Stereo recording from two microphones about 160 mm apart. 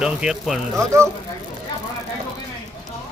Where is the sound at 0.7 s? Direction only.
20° right (ahead or behind).